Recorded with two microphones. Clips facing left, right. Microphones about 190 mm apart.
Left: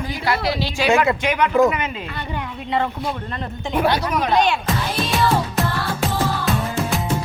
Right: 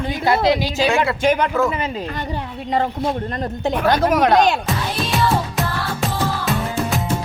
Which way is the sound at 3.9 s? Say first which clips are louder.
Right 5 dB; 45° right (ahead or behind).